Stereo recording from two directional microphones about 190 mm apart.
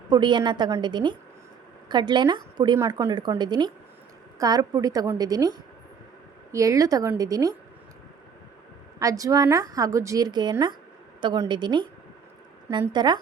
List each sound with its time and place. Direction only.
0.1 s a woman's voice: 25° right (ahead or behind)
9.0 s a woman's voice: 15° right (ahead or behind)
12.9 s a woman's voice: 25° right (ahead or behind)